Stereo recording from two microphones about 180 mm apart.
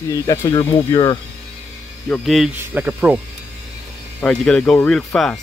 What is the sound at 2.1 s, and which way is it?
Speech, centre (ahead or behind).